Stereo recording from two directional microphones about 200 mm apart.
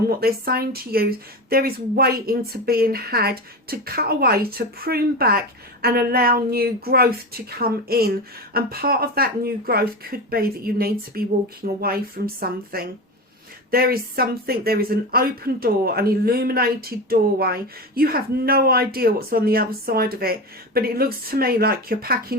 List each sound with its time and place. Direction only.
0.2 s speech: 50° right (ahead or behind)